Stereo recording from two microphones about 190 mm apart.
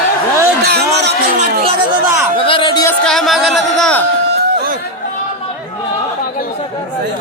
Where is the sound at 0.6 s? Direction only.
60° right (ahead or behind).